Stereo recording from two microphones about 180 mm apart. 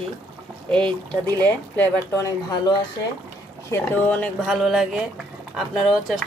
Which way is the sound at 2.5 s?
25° left (ahead or behind).